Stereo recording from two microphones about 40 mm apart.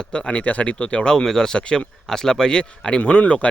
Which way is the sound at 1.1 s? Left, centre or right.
Centre.